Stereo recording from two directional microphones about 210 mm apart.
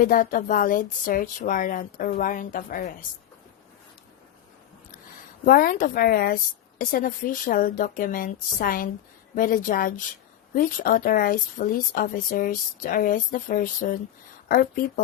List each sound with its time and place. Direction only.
0.0 s speech: 40° left (ahead or behind)
5.5 s a woman's voice: 40° left (ahead or behind)